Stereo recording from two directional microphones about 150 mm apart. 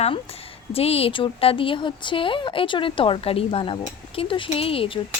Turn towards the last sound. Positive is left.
turn(degrees=40)  # may be behind; listen again after turning